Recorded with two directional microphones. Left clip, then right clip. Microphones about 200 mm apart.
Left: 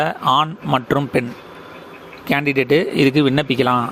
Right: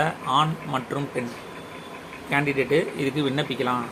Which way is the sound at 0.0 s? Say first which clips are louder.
Left 6 dB; 50° left (ahead or behind).